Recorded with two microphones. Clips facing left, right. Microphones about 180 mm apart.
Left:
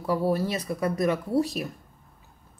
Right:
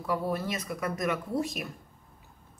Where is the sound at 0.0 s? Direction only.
30° left (ahead or behind).